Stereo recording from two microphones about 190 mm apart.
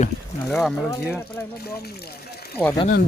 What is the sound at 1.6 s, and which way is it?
Water, 55° left (ahead or behind).